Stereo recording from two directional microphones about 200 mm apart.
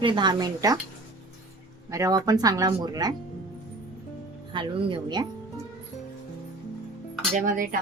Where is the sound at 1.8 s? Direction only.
15° right (ahead or behind).